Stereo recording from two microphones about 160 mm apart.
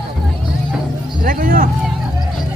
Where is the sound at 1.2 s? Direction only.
60° right (ahead or behind).